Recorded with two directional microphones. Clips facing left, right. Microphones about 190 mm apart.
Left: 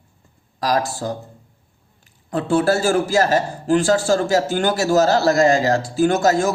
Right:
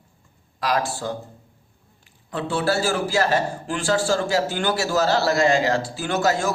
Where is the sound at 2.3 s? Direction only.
45° left (ahead or behind).